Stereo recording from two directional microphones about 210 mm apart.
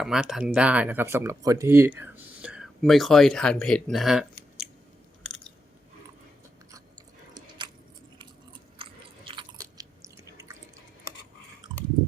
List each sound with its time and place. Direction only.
0.0 s speech: centre (ahead or behind)
8.8 s biting: 25° right (ahead or behind)